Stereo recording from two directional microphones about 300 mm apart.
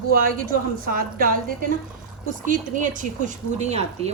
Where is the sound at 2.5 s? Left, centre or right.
Right.